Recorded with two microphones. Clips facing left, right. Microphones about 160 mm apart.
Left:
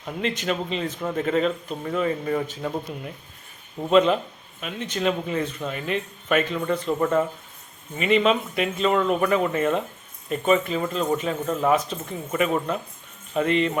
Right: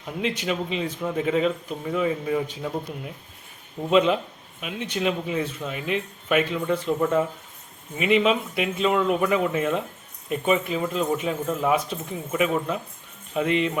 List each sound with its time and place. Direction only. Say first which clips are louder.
0.0 s speech: even; 5° right (ahead or behind)